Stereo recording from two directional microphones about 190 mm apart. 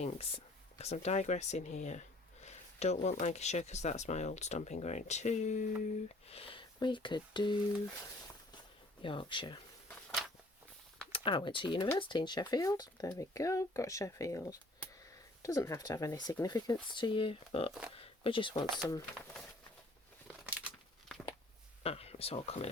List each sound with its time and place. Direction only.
0.0 s speech: 30° left (ahead or behind)
8.5 s a sound: 25° left (ahead or behind)
11.1 s speech: 25° left (ahead or behind)
18.0 s a sound: 30° left (ahead or behind)
18.8 s speech: 10° left (ahead or behind)
21.8 s speech: 35° left (ahead or behind)